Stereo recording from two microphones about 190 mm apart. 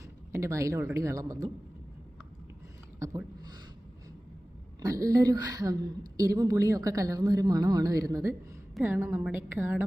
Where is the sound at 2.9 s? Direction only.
15° right (ahead or behind).